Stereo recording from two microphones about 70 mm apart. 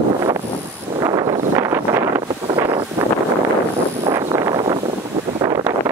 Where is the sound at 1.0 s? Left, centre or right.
Right.